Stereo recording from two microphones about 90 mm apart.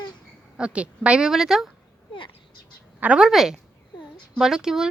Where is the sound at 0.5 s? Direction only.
10° right (ahead or behind).